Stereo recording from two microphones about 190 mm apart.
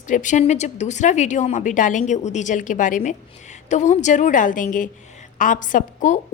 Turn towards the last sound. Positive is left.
turn(degrees=40)  # may be behind; listen again after turning